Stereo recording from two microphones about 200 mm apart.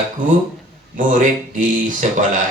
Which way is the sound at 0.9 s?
40° right (ahead or behind).